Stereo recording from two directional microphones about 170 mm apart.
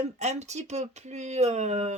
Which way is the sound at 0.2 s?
40° right (ahead or behind).